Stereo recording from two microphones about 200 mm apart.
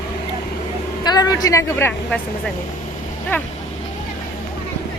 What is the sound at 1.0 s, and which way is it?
A woman's voice, 20° left (ahead or behind).